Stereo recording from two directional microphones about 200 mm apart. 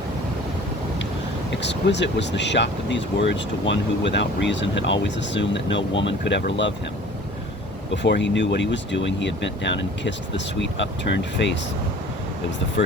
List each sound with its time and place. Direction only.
1.6 s speech: 60° left (ahead or behind)
8.0 s speech: 60° left (ahead or behind)